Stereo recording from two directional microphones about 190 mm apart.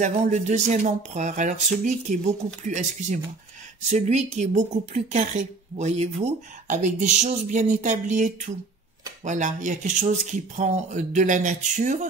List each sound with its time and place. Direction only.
0.0 s a woman's voice: 40° right (ahead or behind)